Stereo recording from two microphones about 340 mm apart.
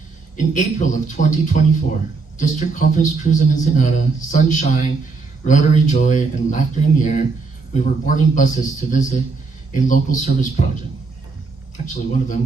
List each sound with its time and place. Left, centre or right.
0.3 s a man's voice: left
11.8 s a man's voice: left